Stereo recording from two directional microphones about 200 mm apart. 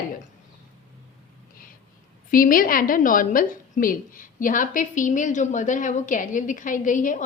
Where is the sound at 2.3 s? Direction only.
45° left (ahead or behind).